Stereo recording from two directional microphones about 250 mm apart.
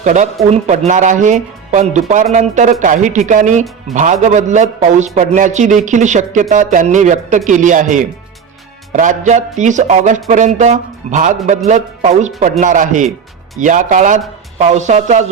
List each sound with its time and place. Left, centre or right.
0.0 s a man's voice: right